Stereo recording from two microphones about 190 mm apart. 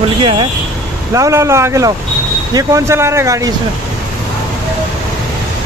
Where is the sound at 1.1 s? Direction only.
15° right (ahead or behind).